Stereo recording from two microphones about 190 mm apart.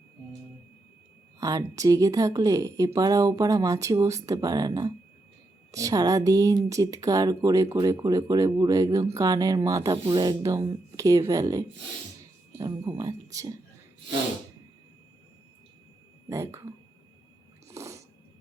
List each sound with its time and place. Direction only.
1.4 s speech: 20° right (ahead or behind)
16.3 s speech: 15° right (ahead or behind)
17.7 s cat: 15° right (ahead or behind)